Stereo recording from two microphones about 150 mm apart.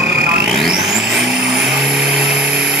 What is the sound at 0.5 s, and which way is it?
Vehicle, centre (ahead or behind).